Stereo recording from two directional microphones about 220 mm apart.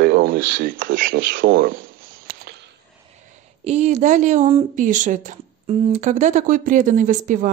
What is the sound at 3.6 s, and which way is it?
Speech, 30° right (ahead or behind).